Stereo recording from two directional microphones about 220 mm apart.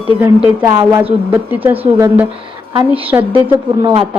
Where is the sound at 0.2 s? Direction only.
10° right (ahead or behind).